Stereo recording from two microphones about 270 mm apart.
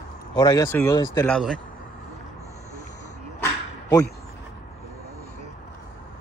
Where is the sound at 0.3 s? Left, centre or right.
Centre.